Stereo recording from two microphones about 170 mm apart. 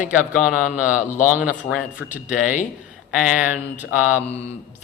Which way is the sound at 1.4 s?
5° right (ahead or behind).